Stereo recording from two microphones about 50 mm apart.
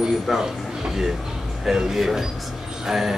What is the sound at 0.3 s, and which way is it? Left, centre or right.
Speech, centre.